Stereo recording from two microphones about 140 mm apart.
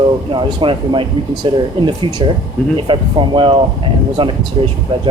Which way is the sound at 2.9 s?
35° right (ahead or behind).